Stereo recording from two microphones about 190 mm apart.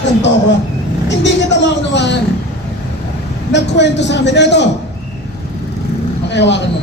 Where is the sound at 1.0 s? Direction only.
65° left (ahead or behind).